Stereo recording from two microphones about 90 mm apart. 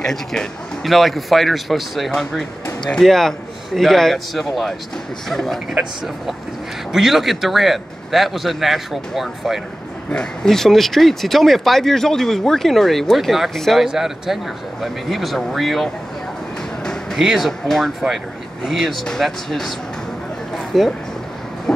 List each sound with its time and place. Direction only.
0.0 s speech: 5° left (ahead or behind)
6.9 s speech: 5° right (ahead or behind)
20.5 s a sound: centre (ahead or behind)